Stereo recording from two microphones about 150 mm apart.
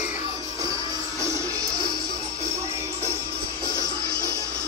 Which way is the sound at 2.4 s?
20° right (ahead or behind).